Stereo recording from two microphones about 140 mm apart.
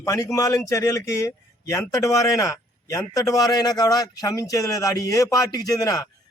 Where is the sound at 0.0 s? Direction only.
25° left (ahead or behind).